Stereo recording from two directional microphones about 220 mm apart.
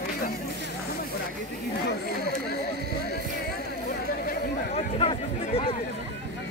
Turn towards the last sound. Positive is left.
turn(degrees=25)  # may be behind; listen again after turning